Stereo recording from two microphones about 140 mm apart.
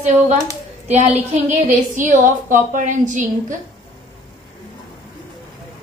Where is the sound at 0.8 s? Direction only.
55° right (ahead or behind).